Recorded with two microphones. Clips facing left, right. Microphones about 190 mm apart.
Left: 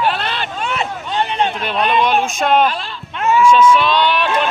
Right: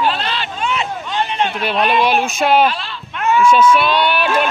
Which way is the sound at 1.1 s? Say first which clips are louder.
Left 1 dB; 35° left (ahead or behind).